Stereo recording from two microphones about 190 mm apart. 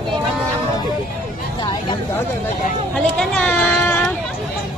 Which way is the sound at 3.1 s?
5° left (ahead or behind).